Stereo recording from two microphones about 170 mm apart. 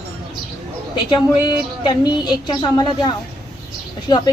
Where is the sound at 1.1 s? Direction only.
25° left (ahead or behind).